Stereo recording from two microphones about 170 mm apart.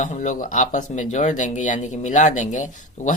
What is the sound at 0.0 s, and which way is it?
Speech, 45° left (ahead or behind).